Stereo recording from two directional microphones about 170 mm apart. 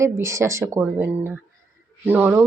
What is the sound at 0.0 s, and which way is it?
A woman's voice, 15° right (ahead or behind).